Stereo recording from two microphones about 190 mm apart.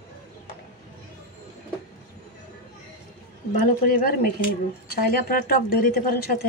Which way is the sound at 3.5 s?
45° left (ahead or behind).